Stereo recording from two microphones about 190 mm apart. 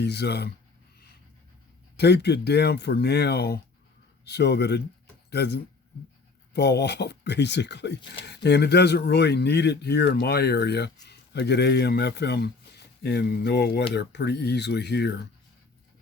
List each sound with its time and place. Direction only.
0.0 s speech: 60° left (ahead or behind)
2.0 s speech: 60° left (ahead or behind)